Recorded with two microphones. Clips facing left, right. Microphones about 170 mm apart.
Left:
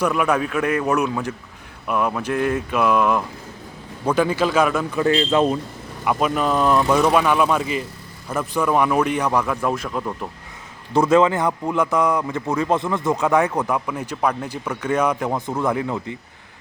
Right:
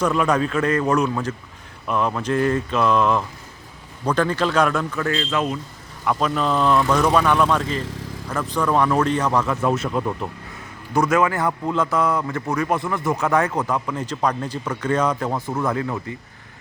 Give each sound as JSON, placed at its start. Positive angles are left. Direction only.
{"t": 0.0, "sound": "speech", "side_deg": 10}
{"t": 4.9, "sound": "a man's voice", "side_deg": 20}
{"t": 6.1, "sound": "speech", "side_deg": 10}
{"t": 9.5, "sound": "speech", "side_deg": -5}
{"t": 10.9, "sound": "speech", "side_deg": 30}